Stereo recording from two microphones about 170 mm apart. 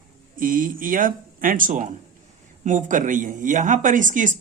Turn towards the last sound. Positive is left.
turn(degrees=-50)  # may be behind; listen again after turning